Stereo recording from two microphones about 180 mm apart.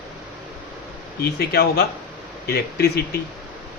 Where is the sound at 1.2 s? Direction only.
60° left (ahead or behind).